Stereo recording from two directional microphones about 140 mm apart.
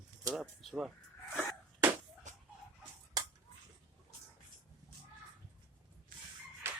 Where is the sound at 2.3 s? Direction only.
60° right (ahead or behind).